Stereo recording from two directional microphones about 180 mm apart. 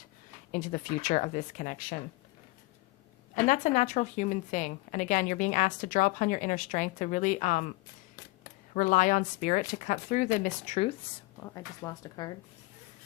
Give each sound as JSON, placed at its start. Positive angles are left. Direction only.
{"t": 0.5, "sound": "a woman's voice", "side_deg": 45}
{"t": 3.3, "sound": "a woman's voice", "side_deg": 45}
{"t": 8.7, "sound": "a woman's voice", "side_deg": 45}
{"t": 11.4, "sound": "speech", "side_deg": 20}